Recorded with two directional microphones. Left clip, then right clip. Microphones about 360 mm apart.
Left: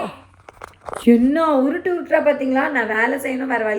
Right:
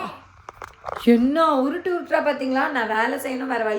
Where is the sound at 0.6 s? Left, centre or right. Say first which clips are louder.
Left 3 dB; left.